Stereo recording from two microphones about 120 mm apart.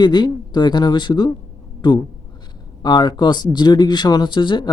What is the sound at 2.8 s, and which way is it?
Speech, 35° left (ahead or behind).